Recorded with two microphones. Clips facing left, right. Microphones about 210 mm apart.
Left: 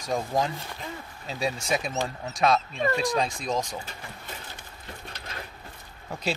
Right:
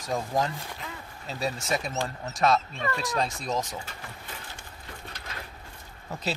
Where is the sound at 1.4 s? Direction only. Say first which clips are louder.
Left 2 dB; 15° left (ahead or behind).